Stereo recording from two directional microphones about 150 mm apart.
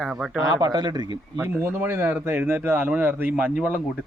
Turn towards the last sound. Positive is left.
turn(degrees=-10)  # may be behind; listen again after turning